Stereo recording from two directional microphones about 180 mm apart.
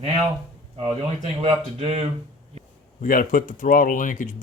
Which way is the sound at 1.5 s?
30° right (ahead or behind).